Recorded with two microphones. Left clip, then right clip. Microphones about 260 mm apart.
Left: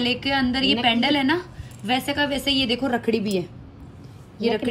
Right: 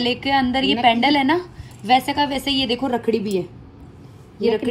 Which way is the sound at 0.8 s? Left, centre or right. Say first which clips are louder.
Right 7 dB; centre.